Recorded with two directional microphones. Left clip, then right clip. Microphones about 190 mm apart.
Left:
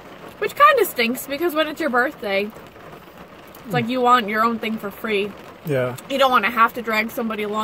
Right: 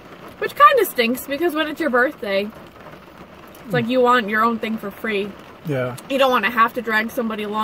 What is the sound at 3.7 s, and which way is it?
Speech, 5° right (ahead or behind).